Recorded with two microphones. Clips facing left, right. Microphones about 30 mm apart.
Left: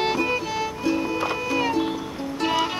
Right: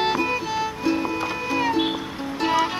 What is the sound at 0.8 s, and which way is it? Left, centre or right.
Music, centre.